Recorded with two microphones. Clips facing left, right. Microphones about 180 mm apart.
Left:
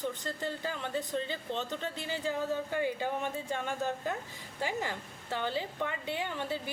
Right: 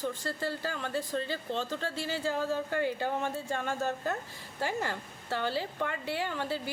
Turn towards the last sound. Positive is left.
turn(degrees=20)  # may be behind; listen again after turning